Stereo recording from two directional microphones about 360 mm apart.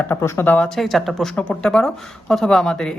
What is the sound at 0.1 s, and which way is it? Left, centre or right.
Speech, centre.